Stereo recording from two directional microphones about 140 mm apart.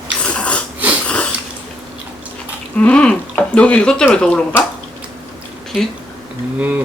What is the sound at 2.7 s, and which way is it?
Speech, 10° left (ahead or behind).